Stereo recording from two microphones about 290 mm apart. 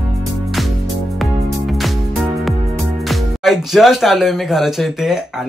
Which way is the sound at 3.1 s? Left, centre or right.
Centre.